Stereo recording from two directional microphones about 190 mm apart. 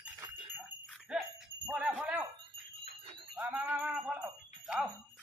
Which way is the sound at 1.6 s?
5° right (ahead or behind).